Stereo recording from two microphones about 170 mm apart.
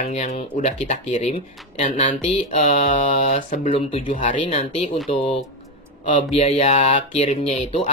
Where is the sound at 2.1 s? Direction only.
40° left (ahead or behind).